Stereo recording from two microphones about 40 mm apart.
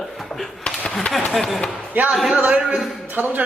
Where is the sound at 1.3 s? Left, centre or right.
Centre.